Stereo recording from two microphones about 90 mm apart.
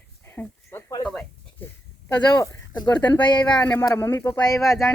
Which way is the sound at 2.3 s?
45° left (ahead or behind).